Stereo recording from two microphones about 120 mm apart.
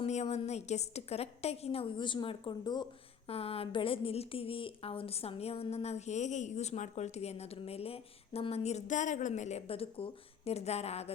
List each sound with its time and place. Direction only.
0.0 s a woman's voice: 65° left (ahead or behind); by 2.8 s 40° left (ahead or behind)
3.2 s a woman's voice: 55° left (ahead or behind)